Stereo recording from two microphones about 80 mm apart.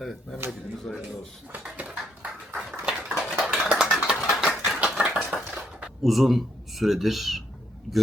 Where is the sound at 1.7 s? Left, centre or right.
Centre.